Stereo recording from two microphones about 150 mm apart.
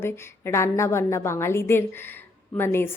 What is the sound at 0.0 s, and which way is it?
A woman's voice, 15° left (ahead or behind).